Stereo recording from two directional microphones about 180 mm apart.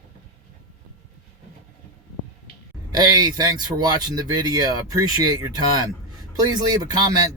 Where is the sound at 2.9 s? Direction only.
20° right (ahead or behind).